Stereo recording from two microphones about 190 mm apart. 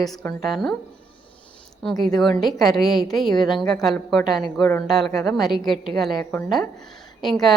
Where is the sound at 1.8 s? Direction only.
Centre (ahead or behind).